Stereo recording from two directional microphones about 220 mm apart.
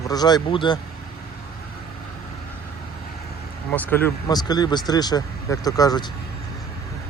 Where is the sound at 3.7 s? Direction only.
10° left (ahead or behind).